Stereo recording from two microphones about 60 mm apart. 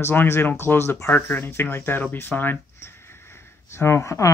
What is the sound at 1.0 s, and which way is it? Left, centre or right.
Speech, left.